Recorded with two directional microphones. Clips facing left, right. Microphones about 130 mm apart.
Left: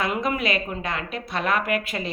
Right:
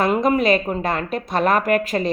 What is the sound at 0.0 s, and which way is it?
A woman's voice, 40° right (ahead or behind).